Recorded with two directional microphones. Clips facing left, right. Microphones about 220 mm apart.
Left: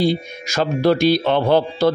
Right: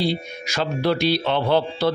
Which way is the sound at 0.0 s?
45° left (ahead or behind).